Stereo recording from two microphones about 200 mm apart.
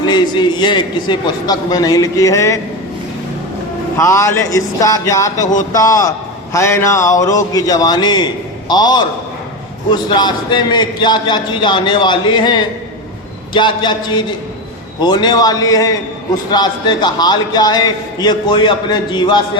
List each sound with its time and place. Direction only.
0.0 s a man's voice: 20° left (ahead or behind)
3.9 s a man's voice: 15° left (ahead or behind)